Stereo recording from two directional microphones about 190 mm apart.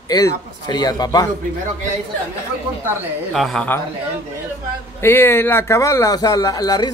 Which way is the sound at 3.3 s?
Centre (ahead or behind).